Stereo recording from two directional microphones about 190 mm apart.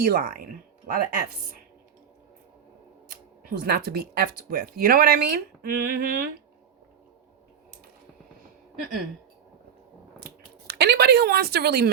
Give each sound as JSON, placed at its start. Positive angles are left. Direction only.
{"t": 0.0, "sound": "speech", "side_deg": -50}
{"t": 3.1, "sound": "speech", "side_deg": -55}
{"t": 10.2, "sound": "computer keyboard", "side_deg": -55}